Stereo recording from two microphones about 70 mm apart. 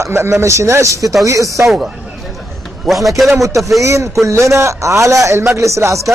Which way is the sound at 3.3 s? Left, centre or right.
Right.